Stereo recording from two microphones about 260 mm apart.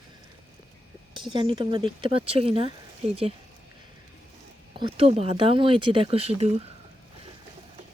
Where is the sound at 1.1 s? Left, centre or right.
Centre.